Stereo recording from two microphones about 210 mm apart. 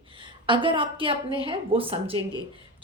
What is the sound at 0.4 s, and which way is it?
Speech, 25° right (ahead or behind).